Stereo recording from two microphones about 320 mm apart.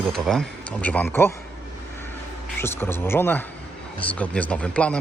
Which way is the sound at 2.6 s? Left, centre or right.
Centre.